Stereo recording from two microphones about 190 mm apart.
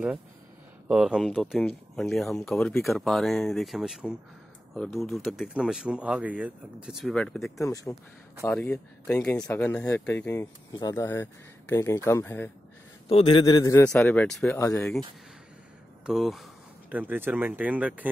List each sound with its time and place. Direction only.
0.8 s speech: 5° right (ahead or behind)
7.5 s speech: 15° left (ahead or behind)
7.9 s speech: centre (ahead or behind)
13.1 s a man's voice: 25° left (ahead or behind)
16.1 s speech: centre (ahead or behind)